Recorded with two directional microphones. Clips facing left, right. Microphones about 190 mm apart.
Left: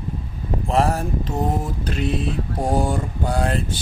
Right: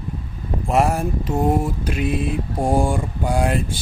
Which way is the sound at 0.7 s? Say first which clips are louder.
Right 2 dB; 10° right (ahead or behind).